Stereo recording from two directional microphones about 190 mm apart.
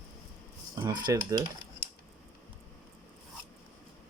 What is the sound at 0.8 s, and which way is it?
Speech, 20° right (ahead or behind).